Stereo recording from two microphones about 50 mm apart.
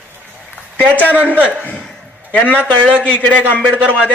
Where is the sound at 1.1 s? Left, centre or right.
Right.